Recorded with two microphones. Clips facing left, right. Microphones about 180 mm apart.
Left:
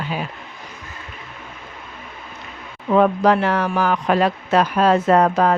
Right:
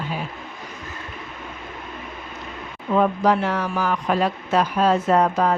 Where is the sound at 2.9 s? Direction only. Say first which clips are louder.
Left 3 dB; 70° left (ahead or behind).